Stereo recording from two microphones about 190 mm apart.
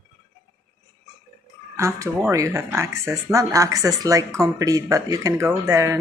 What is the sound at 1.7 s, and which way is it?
Speech, 15° right (ahead or behind).